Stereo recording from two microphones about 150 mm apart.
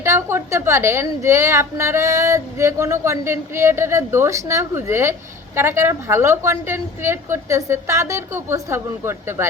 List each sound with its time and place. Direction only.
0.0 s a woman's voice: 15° right (ahead or behind)